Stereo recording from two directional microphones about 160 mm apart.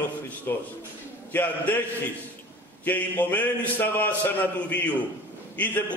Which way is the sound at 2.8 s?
10° left (ahead or behind).